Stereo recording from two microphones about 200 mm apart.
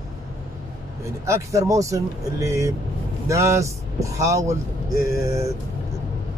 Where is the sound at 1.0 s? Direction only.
15° right (ahead or behind).